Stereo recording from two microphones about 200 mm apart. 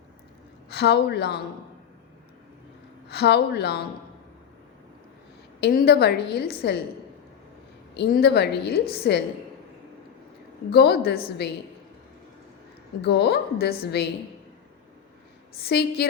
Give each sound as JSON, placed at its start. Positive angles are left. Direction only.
{"t": 0.7, "sound": "a woman's voice", "side_deg": 55}
{"t": 3.1, "sound": "a woman's voice", "side_deg": 55}
{"t": 5.5, "sound": "a woman's voice", "side_deg": 55}
{"t": 7.9, "sound": "a woman's voice", "side_deg": 55}
{"t": 10.7, "sound": "a woman's voice", "side_deg": 55}
{"t": 13.0, "sound": "a woman's voice", "side_deg": 55}
{"t": 15.6, "sound": "a woman's voice", "side_deg": 55}